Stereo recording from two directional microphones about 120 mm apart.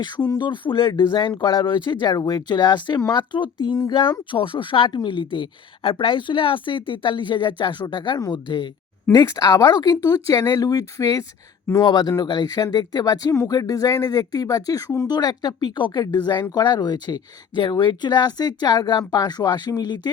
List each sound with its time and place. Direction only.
0.3 s speech: 40° left (ahead or behind)
9.1 s speech: 30° left (ahead or behind)